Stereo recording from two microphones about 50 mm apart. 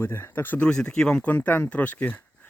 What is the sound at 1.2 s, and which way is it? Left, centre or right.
Speech, left.